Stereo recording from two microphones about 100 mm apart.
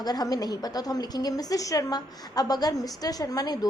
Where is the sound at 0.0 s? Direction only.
40° left (ahead or behind).